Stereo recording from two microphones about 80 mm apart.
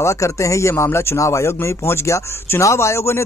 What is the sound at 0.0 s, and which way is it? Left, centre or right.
Speech, left.